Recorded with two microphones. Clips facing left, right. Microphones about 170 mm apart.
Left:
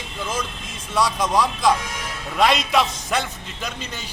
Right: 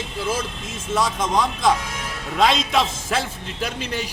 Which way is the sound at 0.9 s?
Centre (ahead or behind).